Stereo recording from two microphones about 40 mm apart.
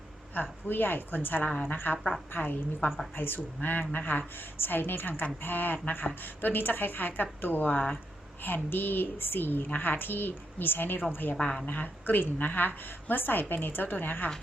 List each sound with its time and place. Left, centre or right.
0.7 s a woman's voice: left
3.2 s a woman's voice: left
8.4 s a woman's voice: left
11.6 s a woman's voice: left